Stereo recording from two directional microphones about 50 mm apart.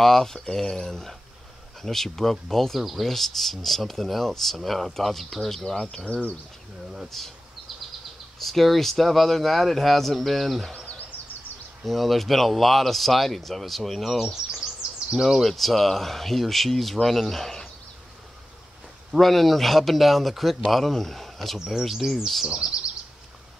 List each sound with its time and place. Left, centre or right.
0.0 s speech: centre
7.1 s speech: centre
8.4 s speech: centre
10.9 s a sound: left
11.8 s speech: centre
19.1 s speech: centre